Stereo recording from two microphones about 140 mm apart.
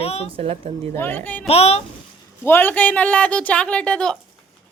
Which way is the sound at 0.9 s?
15° left (ahead or behind).